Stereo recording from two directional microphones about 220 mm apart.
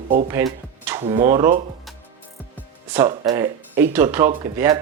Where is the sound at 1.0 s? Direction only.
25° right (ahead or behind).